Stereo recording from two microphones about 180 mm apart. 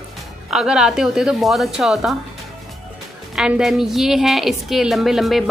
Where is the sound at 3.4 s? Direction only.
5° right (ahead or behind).